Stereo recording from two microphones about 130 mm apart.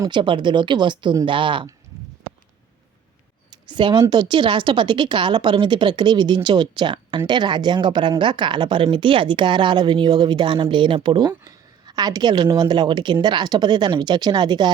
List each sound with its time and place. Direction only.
0.0 s speech: 40° right (ahead or behind)
3.7 s speech: 35° right (ahead or behind)